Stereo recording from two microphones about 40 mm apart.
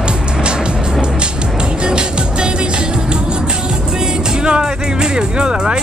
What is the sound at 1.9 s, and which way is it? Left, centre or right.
Music, right.